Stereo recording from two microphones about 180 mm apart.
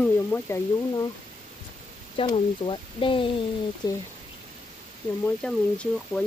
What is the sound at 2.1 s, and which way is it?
Speech, 30° left (ahead or behind).